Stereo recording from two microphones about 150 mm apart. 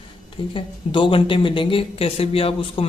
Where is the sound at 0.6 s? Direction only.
35° left (ahead or behind).